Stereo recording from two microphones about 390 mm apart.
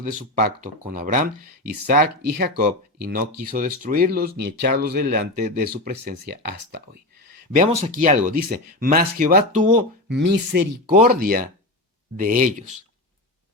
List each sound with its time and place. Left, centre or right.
0.0 s speech: centre